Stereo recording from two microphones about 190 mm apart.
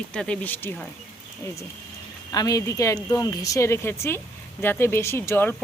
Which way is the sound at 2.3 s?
20° left (ahead or behind).